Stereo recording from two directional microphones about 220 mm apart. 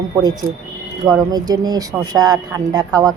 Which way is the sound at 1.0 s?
15° right (ahead or behind).